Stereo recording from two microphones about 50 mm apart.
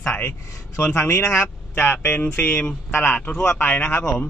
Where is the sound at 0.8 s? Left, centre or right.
Left.